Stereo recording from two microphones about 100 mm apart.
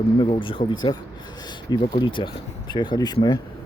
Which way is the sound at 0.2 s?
60° left (ahead or behind).